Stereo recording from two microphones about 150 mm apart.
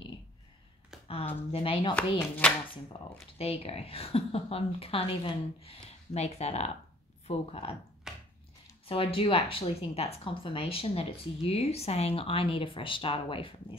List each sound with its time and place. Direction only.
1.0 s a woman's voice: 40° left (ahead or behind)
2.1 s speech: 10° left (ahead or behind)
3.3 s a woman's voice: 40° left (ahead or behind)
8.1 s a sound: 5° right (ahead or behind)
8.8 s a woman's voice: 35° left (ahead or behind)